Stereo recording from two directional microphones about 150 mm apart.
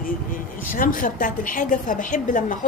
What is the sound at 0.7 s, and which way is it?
A woman's voice, 65° left (ahead or behind).